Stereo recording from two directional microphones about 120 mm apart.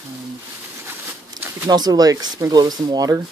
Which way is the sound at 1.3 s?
35° right (ahead or behind).